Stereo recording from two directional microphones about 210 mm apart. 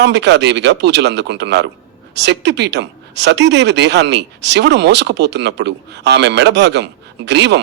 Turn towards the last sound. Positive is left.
turn(degrees=-55)  # may be behind; listen again after turning